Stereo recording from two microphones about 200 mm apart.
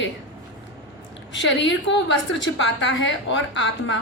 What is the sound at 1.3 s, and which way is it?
A woman's voice, 65° left (ahead or behind).